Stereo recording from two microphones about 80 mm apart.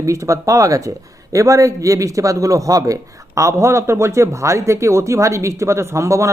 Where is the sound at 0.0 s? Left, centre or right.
Right.